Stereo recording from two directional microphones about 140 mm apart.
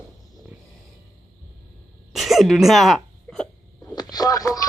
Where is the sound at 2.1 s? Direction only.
Centre (ahead or behind).